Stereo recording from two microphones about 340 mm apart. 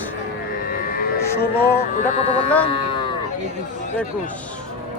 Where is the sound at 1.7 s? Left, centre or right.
Centre.